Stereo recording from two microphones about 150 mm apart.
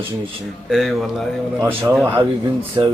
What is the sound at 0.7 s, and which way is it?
Speech, centre (ahead or behind).